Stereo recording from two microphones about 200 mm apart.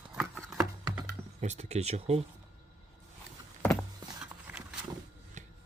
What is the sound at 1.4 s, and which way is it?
Speech, 35° right (ahead or behind).